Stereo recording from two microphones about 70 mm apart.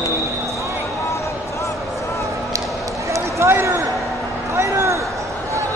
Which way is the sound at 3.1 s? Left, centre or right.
Right.